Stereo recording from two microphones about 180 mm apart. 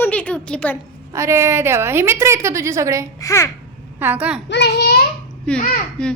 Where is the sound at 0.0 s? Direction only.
10° left (ahead or behind).